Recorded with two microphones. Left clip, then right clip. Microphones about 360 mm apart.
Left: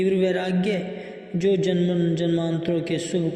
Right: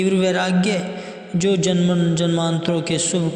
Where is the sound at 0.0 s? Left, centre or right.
Right.